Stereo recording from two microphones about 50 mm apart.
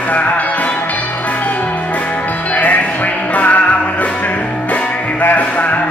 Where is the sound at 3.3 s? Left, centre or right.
Left.